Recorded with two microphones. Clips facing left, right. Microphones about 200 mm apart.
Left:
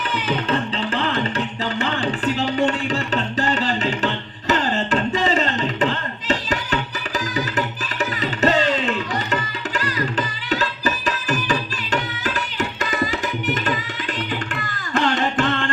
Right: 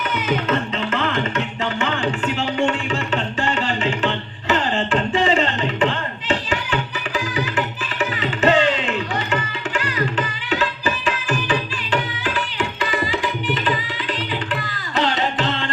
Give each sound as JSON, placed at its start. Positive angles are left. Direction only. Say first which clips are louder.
{"t": 0.1, "sound": "music", "louder": "right 1 dB", "side_deg": 30}